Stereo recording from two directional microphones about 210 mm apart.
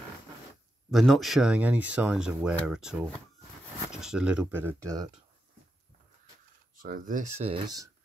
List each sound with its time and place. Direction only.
0.9 s speech: centre (ahead or behind); by 5.1 s 15° right (ahead or behind)
6.8 s speech: 40° right (ahead or behind); by 7.9 s 20° right (ahead or behind)